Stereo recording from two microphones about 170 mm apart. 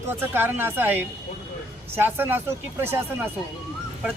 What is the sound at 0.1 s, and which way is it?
Speech, 10° right (ahead or behind).